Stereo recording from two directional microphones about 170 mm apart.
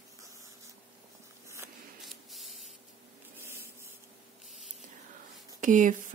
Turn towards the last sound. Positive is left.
turn(degrees=-50)  # may be behind; listen again after turning